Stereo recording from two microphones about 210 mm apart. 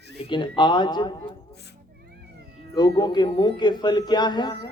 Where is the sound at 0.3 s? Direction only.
20° left (ahead or behind).